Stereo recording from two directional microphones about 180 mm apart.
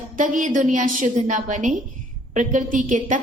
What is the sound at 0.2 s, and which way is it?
A woman's voice, 45° right (ahead or behind).